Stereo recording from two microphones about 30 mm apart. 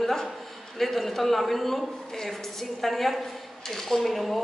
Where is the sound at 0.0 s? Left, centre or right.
Centre.